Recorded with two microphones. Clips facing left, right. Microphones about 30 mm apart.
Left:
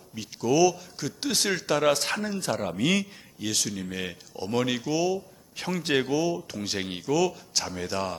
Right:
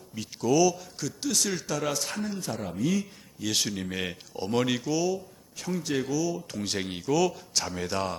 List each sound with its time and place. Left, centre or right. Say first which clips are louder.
0.1 s speech: even; centre
1.2 s speech: left 2 dB; left
3.5 s speech: right 1 dB; centre
4.9 s speech: left 1 dB; centre
5.7 s speech: left 3 dB; left
6.5 s speech: even; centre